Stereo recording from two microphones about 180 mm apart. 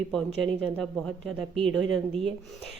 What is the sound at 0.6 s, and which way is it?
A woman's voice, centre (ahead or behind).